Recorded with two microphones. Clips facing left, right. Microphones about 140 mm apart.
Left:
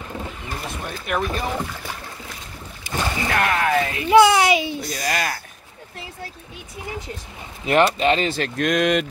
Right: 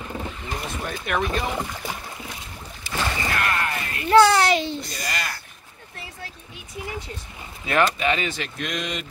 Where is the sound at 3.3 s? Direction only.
85° left.